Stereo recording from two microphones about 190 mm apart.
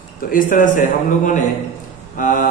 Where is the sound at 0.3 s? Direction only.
45° left (ahead or behind).